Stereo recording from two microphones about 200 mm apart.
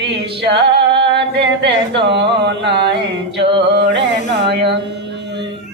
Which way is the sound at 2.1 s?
60° right (ahead or behind).